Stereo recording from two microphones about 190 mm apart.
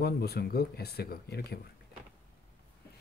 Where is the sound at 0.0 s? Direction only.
55° left (ahead or behind).